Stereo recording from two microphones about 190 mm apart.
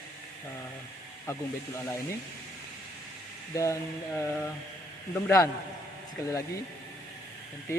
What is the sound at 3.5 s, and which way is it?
Mantra, 15° left (ahead or behind).